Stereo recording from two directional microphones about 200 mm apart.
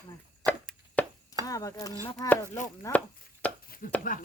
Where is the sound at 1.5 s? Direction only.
15° left (ahead or behind).